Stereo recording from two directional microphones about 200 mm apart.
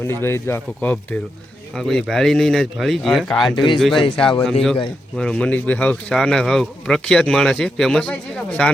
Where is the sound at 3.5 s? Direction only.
25° left (ahead or behind).